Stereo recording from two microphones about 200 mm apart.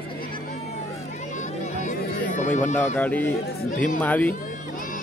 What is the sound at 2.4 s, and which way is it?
Speech, 40° left (ahead or behind).